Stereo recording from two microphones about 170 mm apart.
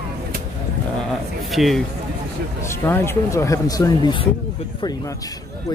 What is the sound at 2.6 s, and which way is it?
Speech, 15° left (ahead or behind).